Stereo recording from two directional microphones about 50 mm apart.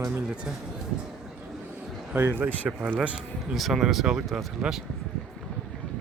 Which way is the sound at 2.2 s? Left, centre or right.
Right.